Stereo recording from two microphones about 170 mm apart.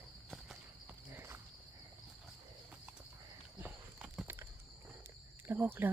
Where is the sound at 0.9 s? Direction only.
15° right (ahead or behind).